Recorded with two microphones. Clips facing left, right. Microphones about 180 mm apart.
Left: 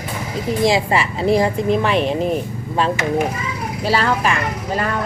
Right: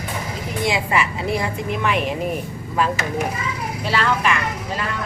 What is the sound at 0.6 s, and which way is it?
Speech, 35° left (ahead or behind).